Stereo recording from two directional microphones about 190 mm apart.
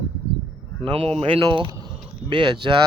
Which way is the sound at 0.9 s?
30° right (ahead or behind).